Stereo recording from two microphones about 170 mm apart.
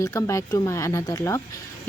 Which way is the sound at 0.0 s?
20° left (ahead or behind).